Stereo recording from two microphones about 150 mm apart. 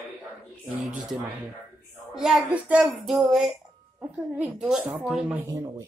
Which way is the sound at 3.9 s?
10° right (ahead or behind).